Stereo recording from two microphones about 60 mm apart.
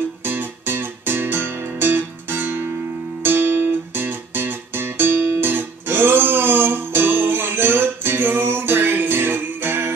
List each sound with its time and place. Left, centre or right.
0.2 s music: right